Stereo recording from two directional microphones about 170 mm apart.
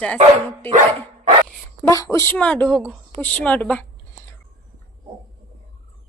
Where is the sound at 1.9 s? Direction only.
20° left (ahead or behind).